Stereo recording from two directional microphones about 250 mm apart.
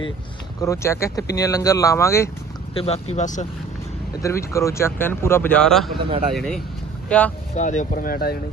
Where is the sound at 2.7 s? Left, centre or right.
Left.